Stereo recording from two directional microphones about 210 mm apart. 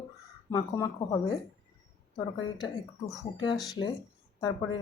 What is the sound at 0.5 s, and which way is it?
Speech, 20° left (ahead or behind).